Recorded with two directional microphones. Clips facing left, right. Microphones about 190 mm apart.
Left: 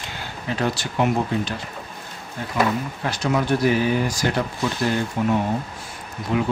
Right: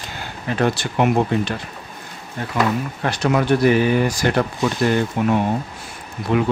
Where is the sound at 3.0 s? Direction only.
60° right (ahead or behind).